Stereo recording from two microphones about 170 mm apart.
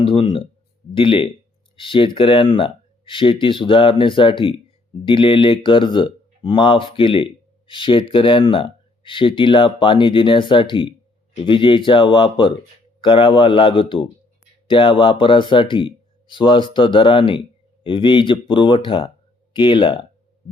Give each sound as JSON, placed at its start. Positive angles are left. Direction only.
{"t": 0.0, "sound": "speech", "side_deg": 30}